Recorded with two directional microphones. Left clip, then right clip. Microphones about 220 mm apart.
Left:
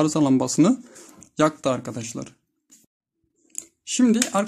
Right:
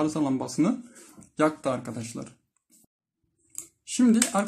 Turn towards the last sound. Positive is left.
turn(degrees=40)  # may be behind; listen again after turning